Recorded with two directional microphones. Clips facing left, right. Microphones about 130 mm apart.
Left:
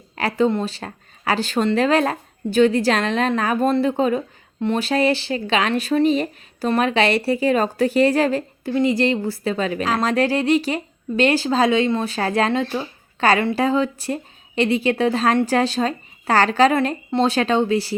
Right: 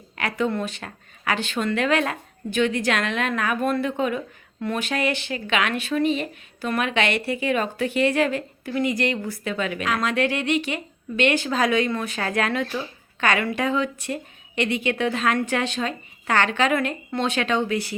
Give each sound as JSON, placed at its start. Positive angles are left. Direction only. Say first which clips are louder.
{"t": 0.2, "sound": "speech", "louder": "left 5 dB", "side_deg": 30}